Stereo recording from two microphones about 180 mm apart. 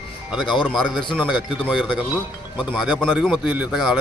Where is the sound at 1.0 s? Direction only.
25° left (ahead or behind).